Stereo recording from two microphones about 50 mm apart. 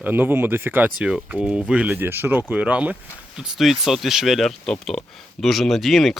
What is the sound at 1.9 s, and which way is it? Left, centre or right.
Speech, right.